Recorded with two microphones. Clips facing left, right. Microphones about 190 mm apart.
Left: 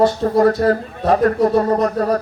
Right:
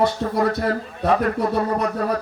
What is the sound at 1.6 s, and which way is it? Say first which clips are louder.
Speech: left 6 dB; 45° left (ahead or behind).